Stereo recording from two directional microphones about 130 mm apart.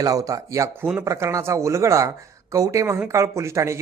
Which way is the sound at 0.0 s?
25° right (ahead or behind).